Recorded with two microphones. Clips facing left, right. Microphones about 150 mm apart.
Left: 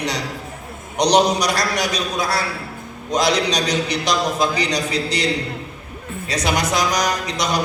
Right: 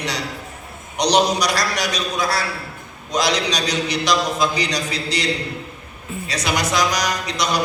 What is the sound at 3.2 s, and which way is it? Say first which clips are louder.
A man's voice: left 2 dB; 50° left (ahead or behind).